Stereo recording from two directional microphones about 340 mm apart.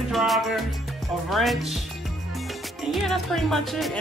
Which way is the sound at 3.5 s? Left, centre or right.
Centre.